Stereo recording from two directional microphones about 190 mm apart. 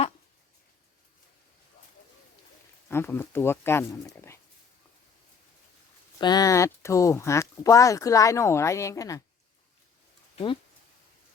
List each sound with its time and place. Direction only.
2.9 s speech: 10° left (ahead or behind)
6.1 s speech: 20° left (ahead or behind)
10.3 s speech: 25° left (ahead or behind)